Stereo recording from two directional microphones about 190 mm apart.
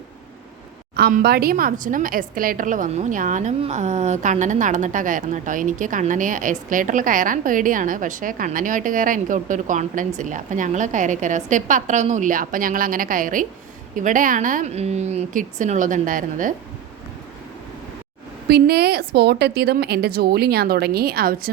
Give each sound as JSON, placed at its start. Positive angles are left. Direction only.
{"t": 0.9, "sound": "a woman's voice", "side_deg": -55}
{"t": 18.4, "sound": "a woman's voice", "side_deg": -55}